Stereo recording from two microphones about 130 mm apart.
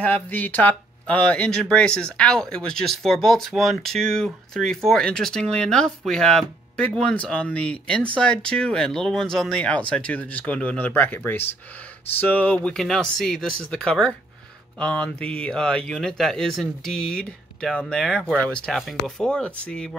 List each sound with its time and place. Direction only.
0.0 s speech: 15° left (ahead or behind)